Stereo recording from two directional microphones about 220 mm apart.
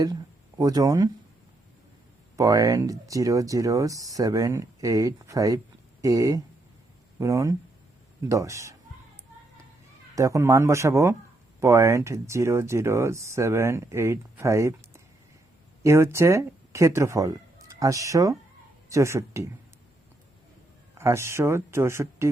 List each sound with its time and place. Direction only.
0.6 s speech: 15° right (ahead or behind)
2.3 s speech: 15° right (ahead or behind)
10.2 s speech: 15° right (ahead or behind)
21.0 s speech: 10° right (ahead or behind)